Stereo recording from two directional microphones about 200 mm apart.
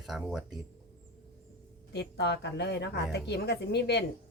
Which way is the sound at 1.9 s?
55° left (ahead or behind).